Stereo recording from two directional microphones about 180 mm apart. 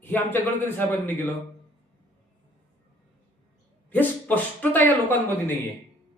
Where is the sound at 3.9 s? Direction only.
10° left (ahead or behind).